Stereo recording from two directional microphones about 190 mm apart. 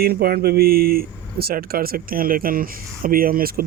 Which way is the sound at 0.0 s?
55° right (ahead or behind).